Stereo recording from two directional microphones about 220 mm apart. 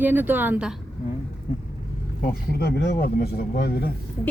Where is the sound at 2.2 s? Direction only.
45° left (ahead or behind).